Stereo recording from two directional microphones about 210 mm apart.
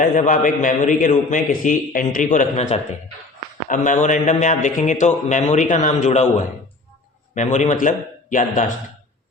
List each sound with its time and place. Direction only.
0.0 s a man's voice: 40° left (ahead or behind)